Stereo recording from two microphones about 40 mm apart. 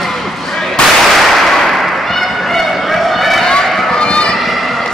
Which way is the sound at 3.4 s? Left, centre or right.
Centre.